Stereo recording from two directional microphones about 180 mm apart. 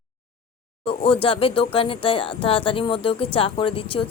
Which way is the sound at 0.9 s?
30° left (ahead or behind).